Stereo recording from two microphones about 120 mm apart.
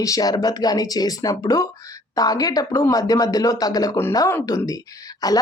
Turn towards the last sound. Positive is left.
turn(degrees=30)  # may be behind; listen again after turning